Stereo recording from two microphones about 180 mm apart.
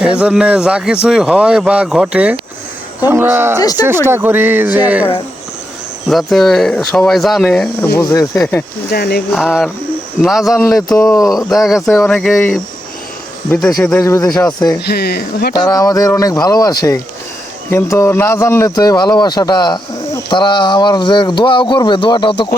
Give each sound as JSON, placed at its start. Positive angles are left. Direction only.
{"t": 0.0, "sound": "speech", "side_deg": -5}
{"t": 3.6, "sound": "speech", "side_deg": 20}
{"t": 3.8, "sound": "speech", "side_deg": -15}
{"t": 6.1, "sound": "speech", "side_deg": 0}
{"t": 7.9, "sound": "speech", "side_deg": 20}
{"t": 8.9, "sound": "speech", "side_deg": 60}
{"t": 9.3, "sound": "speech", "side_deg": 0}
{"t": 13.7, "sound": "speech", "side_deg": 5}
{"t": 14.0, "sound": "speech", "side_deg": 20}
{"t": 14.8, "sound": "speech", "side_deg": 60}
{"t": 15.5, "sound": "speech", "side_deg": 20}